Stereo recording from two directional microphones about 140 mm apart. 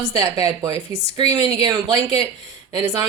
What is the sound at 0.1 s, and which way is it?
Speech, 25° right (ahead or behind).